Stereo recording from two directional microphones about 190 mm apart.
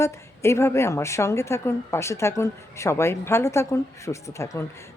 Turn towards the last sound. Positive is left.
turn(degrees=15)  # may be behind; listen again after turning